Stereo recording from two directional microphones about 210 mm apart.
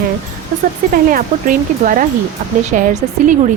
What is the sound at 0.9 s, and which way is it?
A woman's voice, 40° right (ahead or behind).